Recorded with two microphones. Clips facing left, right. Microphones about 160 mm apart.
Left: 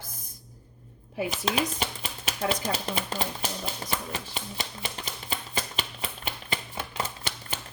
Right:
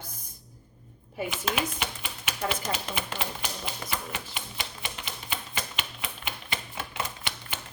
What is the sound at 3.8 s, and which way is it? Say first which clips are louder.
Typewriter: left 2 dB; 35° left (ahead or behind).